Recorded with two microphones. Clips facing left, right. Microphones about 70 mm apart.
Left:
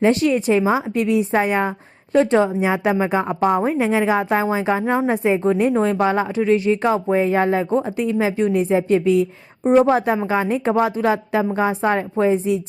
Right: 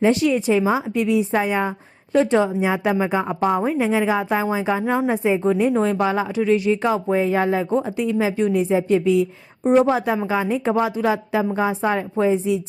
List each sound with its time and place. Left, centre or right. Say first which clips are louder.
0.0 s a woman's voice: left 1 dB; left